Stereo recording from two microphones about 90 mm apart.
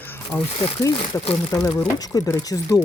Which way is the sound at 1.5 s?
35° left (ahead or behind).